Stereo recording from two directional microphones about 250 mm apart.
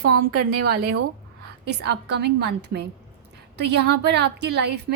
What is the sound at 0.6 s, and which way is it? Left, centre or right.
A woman's voice, right.